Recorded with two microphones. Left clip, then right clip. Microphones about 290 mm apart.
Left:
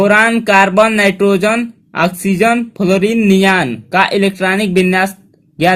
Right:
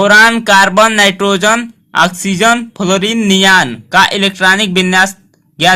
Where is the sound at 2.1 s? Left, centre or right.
Right.